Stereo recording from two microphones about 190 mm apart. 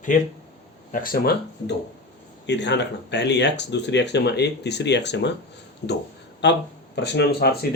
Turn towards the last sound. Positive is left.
turn(degrees=60)  # may be behind; listen again after turning